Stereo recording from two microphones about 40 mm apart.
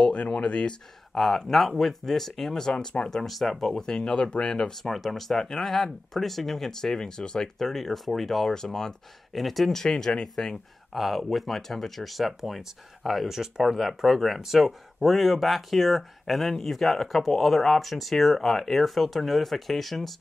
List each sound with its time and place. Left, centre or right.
0.0 s speech: left
1.1 s speech: centre
3.3 s speech: centre
4.9 s speech: centre
8.5 s speech: centre
9.3 s speech: centre
10.9 s speech: centre